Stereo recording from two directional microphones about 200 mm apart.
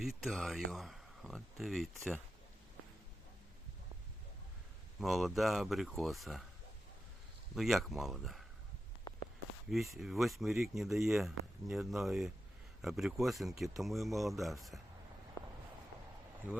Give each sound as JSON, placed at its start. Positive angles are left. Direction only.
{"t": 0.0, "sound": "speech", "side_deg": 0}
{"t": 4.9, "sound": "speech", "side_deg": 0}
{"t": 7.5, "sound": "speech", "side_deg": 0}
{"t": 9.6, "sound": "speech", "side_deg": 0}
{"t": 15.4, "sound": "a sound", "side_deg": 15}